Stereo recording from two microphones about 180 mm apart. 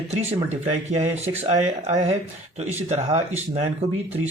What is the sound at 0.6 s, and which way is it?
Speech, 35° right (ahead or behind).